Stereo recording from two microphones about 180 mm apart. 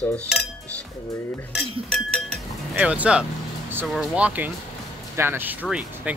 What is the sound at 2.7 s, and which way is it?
Speech, 5° right (ahead or behind).